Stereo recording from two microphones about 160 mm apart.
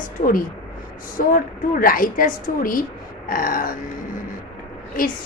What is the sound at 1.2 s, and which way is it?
A woman's voice, 60° left (ahead or behind).